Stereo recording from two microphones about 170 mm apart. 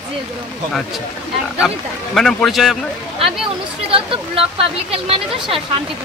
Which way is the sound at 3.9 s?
35° right (ahead or behind).